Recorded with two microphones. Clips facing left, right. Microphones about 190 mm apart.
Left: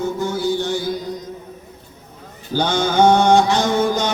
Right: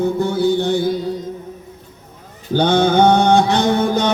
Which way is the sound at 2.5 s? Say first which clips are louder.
Right 4 dB; 60° right (ahead or behind).